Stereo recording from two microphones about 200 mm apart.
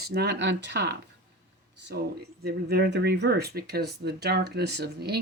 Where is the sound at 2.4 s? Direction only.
50° right (ahead or behind).